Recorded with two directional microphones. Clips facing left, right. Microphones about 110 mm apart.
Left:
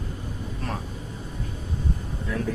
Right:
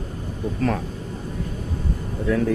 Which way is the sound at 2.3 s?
90° right.